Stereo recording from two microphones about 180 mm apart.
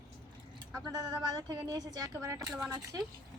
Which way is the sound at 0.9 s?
20° right (ahead or behind).